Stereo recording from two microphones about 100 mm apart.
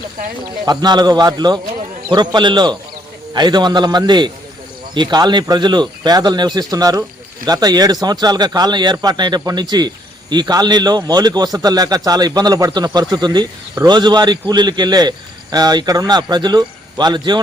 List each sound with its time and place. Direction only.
0.6 s speech: 45° right (ahead or behind)